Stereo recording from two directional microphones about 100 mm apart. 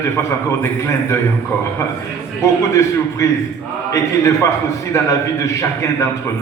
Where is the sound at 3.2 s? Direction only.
30° left (ahead or behind).